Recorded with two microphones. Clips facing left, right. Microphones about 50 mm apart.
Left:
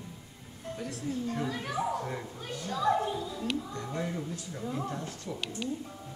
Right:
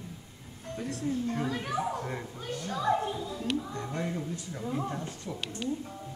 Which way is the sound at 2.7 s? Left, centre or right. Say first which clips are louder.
Left 1 dB; centre.